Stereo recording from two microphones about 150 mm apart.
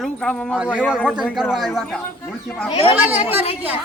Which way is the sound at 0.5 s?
5° right (ahead or behind).